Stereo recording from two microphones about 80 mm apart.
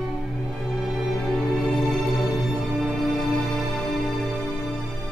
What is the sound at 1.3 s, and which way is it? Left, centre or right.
Music, centre.